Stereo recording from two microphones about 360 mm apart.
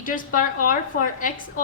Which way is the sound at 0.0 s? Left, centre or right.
Left.